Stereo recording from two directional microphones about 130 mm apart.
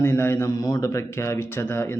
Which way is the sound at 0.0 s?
20° left (ahead or behind).